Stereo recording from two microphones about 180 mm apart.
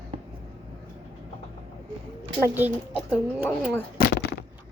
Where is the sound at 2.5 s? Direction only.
10° right (ahead or behind).